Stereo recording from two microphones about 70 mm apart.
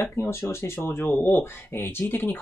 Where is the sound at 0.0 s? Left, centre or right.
Left.